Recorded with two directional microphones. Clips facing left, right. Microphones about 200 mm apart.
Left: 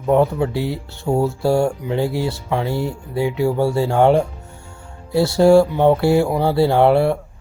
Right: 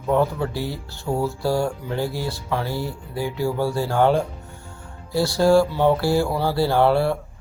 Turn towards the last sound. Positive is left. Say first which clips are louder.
# left 4 dB
turn(degrees=20)  # may be behind; listen again after turning